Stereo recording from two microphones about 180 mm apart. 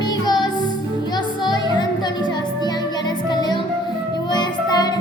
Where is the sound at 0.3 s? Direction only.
25° left (ahead or behind).